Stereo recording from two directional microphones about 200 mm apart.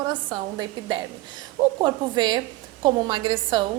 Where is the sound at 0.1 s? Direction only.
25° right (ahead or behind).